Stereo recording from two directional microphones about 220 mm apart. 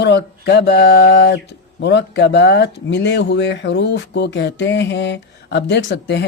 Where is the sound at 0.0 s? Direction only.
50° left (ahead or behind).